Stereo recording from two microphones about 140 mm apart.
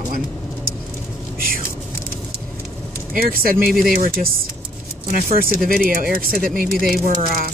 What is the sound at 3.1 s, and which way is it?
Speech, 90° right.